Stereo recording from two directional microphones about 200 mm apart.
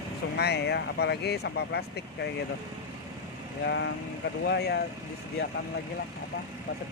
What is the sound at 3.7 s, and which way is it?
Speech, 60° left (ahead or behind).